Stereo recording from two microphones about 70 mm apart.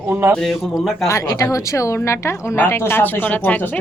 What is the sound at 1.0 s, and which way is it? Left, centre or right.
A woman's voice, left.